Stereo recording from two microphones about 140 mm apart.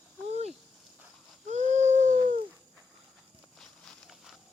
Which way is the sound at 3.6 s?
Centre (ahead or behind).